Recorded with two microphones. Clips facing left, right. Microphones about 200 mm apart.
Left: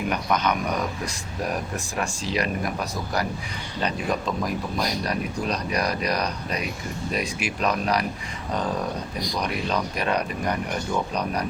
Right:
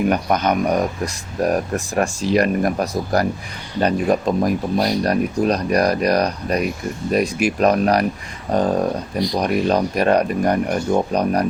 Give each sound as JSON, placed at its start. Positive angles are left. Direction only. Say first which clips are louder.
{"t": 0.1, "sound": "speech", "louder": "right 6 dB", "side_deg": -45}